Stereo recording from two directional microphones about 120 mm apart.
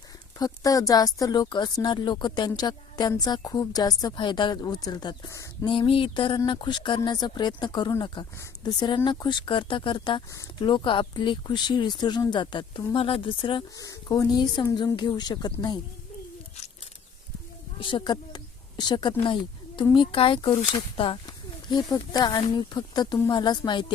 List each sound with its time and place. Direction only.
0.3 s speech: 30° left (ahead or behind)
5.6 s speech: 45° left (ahead or behind)
13.7 s speech: 30° left (ahead or behind)
17.7 s speech: 45° left (ahead or behind)